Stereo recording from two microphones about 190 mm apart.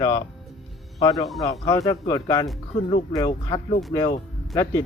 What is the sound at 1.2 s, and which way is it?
Speech, centre (ahead or behind).